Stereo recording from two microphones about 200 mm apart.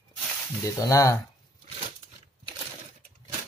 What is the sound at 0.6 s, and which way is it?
Mantra, 15° left (ahead or behind).